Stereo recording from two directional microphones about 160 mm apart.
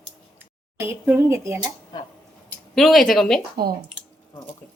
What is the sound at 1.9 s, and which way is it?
Speech, 25° left (ahead or behind).